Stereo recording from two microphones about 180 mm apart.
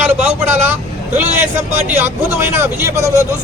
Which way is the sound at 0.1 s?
10° right (ahead or behind).